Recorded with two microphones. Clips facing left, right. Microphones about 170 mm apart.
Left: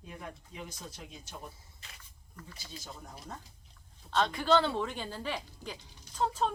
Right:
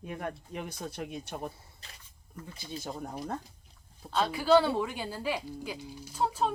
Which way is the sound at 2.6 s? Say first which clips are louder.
Right 10 dB; 60° right (ahead or behind).